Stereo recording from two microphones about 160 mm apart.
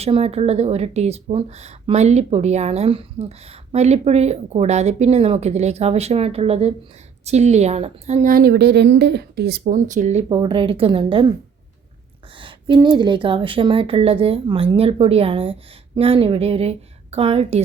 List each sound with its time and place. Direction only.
0.0 s a woman's voice: 40° right (ahead or behind); by 9.6 s 90° right
9.6 s speech: 50° right (ahead or behind)
10.2 s speech: 30° right (ahead or behind)
12.4 s speech: 30° right (ahead or behind)